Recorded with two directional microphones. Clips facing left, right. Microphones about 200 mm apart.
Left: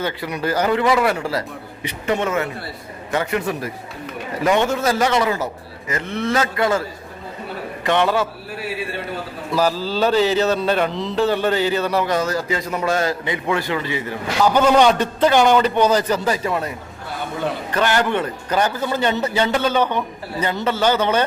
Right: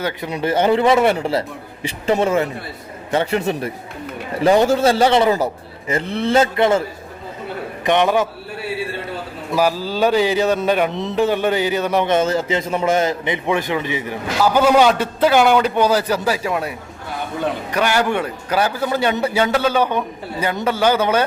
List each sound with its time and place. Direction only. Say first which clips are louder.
0.3 s a man's voice: right 4 dB; 25° right (ahead or behind)
7.9 s a man's voice: right 2 dB; 15° right (ahead or behind)
9.5 s a man's voice: right 1 dB; 15° right (ahead or behind)